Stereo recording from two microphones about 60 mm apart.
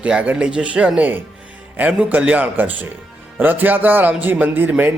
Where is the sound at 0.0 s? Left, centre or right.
Right.